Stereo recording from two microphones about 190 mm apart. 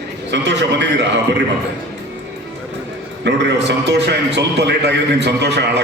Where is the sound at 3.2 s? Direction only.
65° right (ahead or behind).